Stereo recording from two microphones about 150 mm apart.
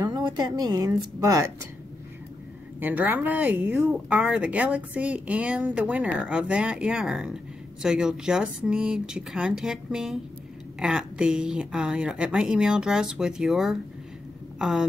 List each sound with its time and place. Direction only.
0.0 s speech: 30° right (ahead or behind)
2.8 s speech: 10° right (ahead or behind)